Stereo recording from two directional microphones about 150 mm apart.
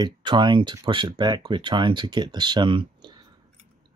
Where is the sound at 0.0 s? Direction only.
30° right (ahead or behind).